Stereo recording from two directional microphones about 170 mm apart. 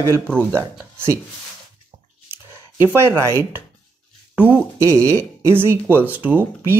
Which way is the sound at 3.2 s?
15° right (ahead or behind).